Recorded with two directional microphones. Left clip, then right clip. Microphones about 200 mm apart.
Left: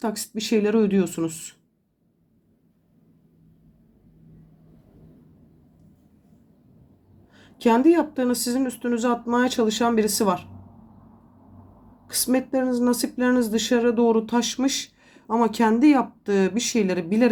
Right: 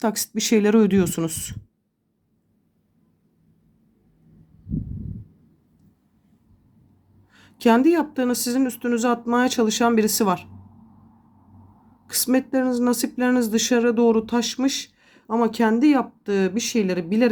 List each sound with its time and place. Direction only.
0.0 s a woman's voice: 30° right (ahead or behind)
7.3 s speech: 25° right (ahead or behind)
12.0 s speech: 30° right (ahead or behind)